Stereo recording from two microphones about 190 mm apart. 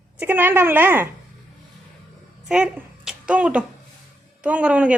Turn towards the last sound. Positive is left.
turn(degrees=-5)  # may be behind; listen again after turning